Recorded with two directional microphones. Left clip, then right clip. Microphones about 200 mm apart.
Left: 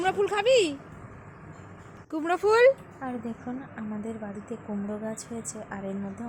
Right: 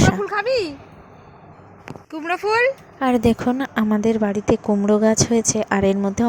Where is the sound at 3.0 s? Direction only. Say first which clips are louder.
Right 18 dB; 45° right (ahead or behind).